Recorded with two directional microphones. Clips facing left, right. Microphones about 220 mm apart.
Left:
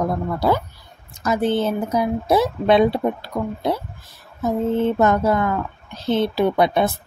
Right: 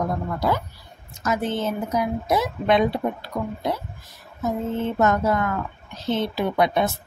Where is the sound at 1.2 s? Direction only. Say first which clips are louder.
Left 5 dB; 30° left (ahead or behind).